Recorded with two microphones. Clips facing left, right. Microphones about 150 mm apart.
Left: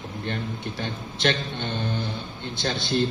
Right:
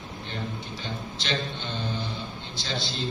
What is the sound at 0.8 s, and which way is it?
A man's voice, 55° left (ahead or behind).